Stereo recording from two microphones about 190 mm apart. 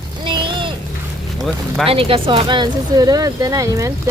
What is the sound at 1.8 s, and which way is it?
Speech, 30° right (ahead or behind).